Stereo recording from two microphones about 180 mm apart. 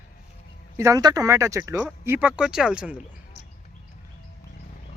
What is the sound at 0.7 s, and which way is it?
Speech, 20° right (ahead or behind).